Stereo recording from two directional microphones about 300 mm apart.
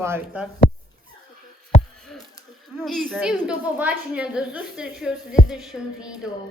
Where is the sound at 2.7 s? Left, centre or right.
Centre.